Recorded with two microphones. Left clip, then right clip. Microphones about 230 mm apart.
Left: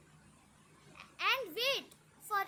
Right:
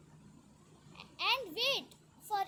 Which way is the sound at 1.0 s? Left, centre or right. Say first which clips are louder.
Even; centre.